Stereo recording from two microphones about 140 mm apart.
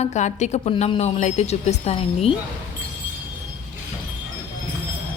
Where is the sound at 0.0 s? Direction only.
55° left (ahead or behind).